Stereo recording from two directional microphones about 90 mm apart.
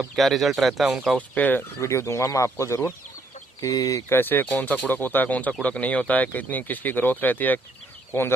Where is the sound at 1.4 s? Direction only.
20° left (ahead or behind).